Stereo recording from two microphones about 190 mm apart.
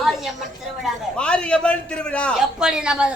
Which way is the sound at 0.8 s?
5° left (ahead or behind).